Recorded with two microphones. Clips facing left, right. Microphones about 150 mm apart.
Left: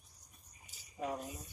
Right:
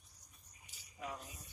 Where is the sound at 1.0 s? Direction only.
35° left (ahead or behind).